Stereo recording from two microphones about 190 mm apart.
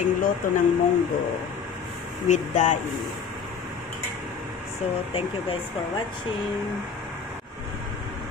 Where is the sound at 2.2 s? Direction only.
40° left (ahead or behind).